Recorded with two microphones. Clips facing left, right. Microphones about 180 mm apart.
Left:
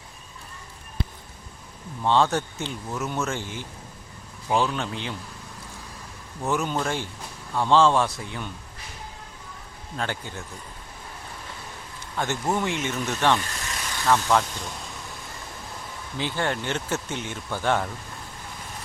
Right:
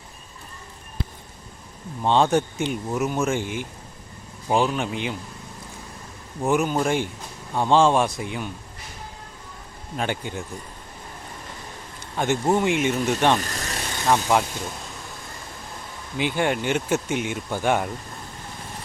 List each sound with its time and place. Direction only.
2.0 s speech: 15° right (ahead or behind)
6.4 s speech: 15° right (ahead or behind)
10.0 s speech: 15° right (ahead or behind)
12.1 s speech: 15° right (ahead or behind)
13.4 s vehicle: 40° right (ahead or behind)
13.9 s speech: 20° right (ahead or behind)
16.1 s speech: 15° right (ahead or behind)